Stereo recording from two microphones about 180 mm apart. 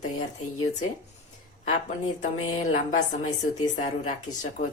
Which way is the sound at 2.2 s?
45° left (ahead or behind).